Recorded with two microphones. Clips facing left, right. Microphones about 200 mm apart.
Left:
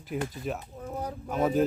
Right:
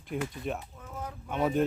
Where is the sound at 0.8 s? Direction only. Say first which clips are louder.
Left 6 dB; 35° left (ahead or behind).